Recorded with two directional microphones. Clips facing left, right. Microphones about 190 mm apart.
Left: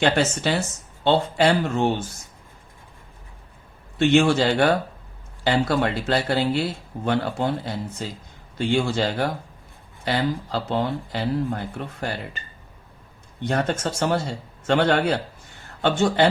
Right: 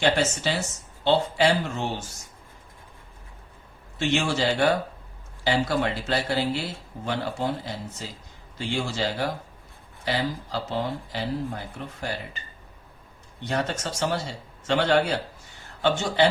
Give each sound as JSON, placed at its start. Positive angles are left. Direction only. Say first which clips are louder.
{"t": 0.0, "sound": "speech", "louder": "left 2 dB", "side_deg": 60}
{"t": 3.9, "sound": "speech", "louder": "left 8 dB", "side_deg": 60}
{"t": 13.4, "sound": "speech", "louder": "left 4 dB", "side_deg": 50}